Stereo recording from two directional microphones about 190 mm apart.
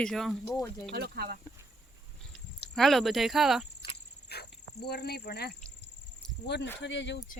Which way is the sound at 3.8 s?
55° left (ahead or behind).